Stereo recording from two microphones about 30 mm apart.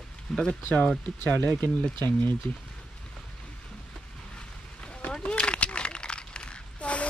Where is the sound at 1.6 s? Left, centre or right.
Left.